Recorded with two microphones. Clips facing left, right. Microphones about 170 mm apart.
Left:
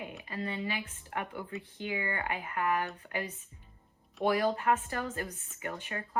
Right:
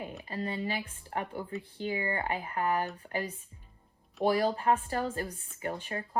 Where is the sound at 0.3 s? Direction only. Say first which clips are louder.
Right 2 dB; 40° right (ahead or behind).